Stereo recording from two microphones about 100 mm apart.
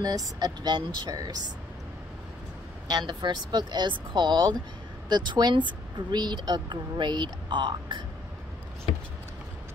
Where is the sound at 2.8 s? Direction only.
45° right (ahead or behind).